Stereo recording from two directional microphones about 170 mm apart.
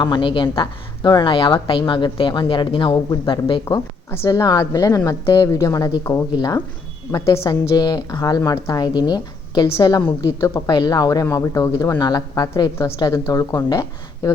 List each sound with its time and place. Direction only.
0.0 s a woman's voice: 30° left (ahead or behind)